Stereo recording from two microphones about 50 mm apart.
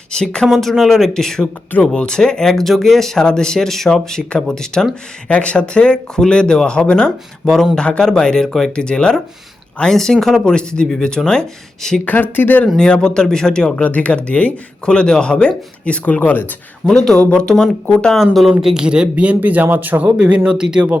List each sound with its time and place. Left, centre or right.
0.1 s speech: centre
0.4 s speech: centre
10.4 s speech: centre
12.0 s speech: left
12.6 s speech: centre
13.8 s speech: left
16.8 s speech: centre
18.6 s speech: centre
19.1 s speech: right
20.1 s speech: centre